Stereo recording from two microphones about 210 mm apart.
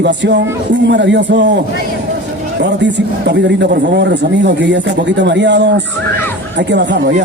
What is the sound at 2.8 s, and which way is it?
A man's voice, 55° right (ahead or behind).